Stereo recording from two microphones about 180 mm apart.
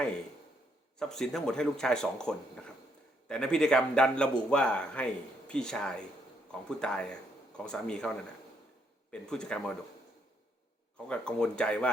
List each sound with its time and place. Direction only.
0.9 s speech: 5° left (ahead or behind)
11.1 s speech: 5° left (ahead or behind)